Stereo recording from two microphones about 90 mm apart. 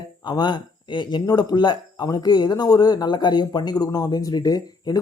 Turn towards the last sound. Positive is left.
turn(degrees=45)  # may be behind; listen again after turning